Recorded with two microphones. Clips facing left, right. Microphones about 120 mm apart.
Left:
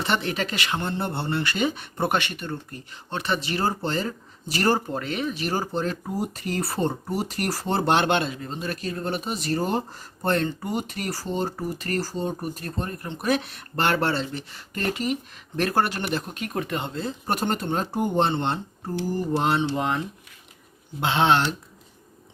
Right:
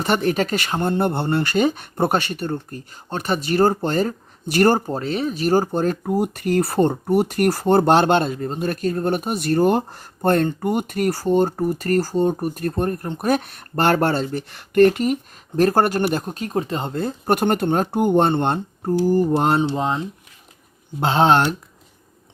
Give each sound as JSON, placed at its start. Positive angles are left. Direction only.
{"t": 0.0, "sound": "speech", "side_deg": -45}
{"t": 4.9, "sound": "speech", "side_deg": -35}
{"t": 16.9, "sound": "speech", "side_deg": -55}
{"t": 19.7, "sound": "speech", "side_deg": -30}
{"t": 21.0, "sound": "speech", "side_deg": -40}